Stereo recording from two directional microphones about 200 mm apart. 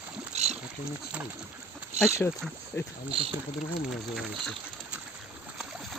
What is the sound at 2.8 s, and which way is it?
Speech, 15° left (ahead or behind).